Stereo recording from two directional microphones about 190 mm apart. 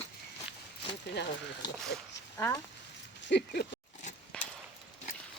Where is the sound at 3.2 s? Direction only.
65° left (ahead or behind).